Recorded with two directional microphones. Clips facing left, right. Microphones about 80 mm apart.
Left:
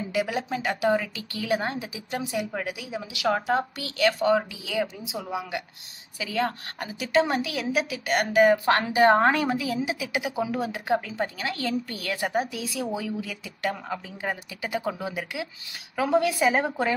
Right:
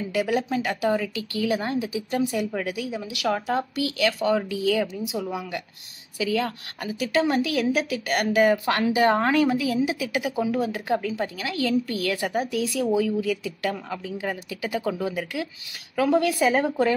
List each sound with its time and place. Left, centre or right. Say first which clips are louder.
0.1 s a woman's voice: right 4 dB; left
2.6 s speech: right 3 dB; centre
3.1 s speech: left 2 dB; left
4.6 s speech: right 5 dB; centre
6.1 s a woman's voice: right 2 dB; left